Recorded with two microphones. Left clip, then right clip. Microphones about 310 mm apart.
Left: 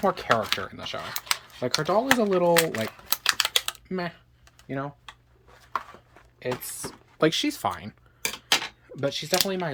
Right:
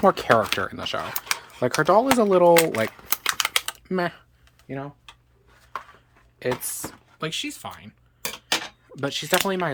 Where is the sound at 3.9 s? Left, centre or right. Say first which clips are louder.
Right 9 dB; centre.